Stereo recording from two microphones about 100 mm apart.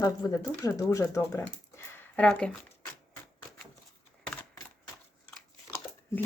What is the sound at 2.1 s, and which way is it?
Speech, 10° left (ahead or behind).